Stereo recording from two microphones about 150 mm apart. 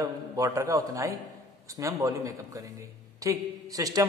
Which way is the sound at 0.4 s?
20° right (ahead or behind).